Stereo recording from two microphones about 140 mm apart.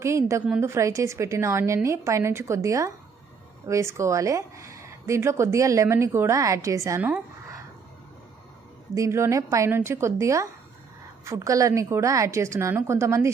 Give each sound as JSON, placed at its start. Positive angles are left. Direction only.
{"t": 0.0, "sound": "speech", "side_deg": -20}
{"t": 9.0, "sound": "speech", "side_deg": -20}